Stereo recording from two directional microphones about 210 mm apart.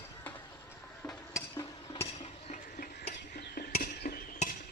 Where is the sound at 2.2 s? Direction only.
40° left (ahead or behind).